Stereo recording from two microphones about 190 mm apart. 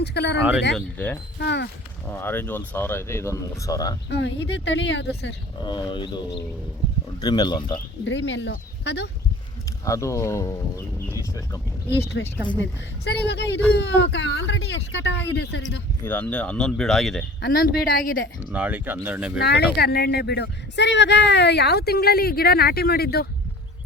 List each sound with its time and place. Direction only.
0.0 s speech: 60° left (ahead or behind)
0.3 s speech: 10° right (ahead or behind)
0.9 s speech: 10° left (ahead or behind)
1.4 s speech: 60° left (ahead or behind)
2.0 s speech: 10° left (ahead or behind)
4.1 s speech: 70° left (ahead or behind)
5.6 s speech: 25° left (ahead or behind)
8.0 s speech: 70° left (ahead or behind)
9.8 s speech: 15° left (ahead or behind)
12.2 s speech: 70° left (ahead or behind)
16.0 s speech: 10° left (ahead or behind)
17.4 s speech: 50° left (ahead or behind)
18.5 s speech: 10° right (ahead or behind)
19.4 s speech: 60° left (ahead or behind)